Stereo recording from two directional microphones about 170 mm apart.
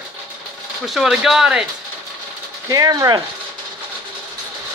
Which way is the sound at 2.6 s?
20° right (ahead or behind).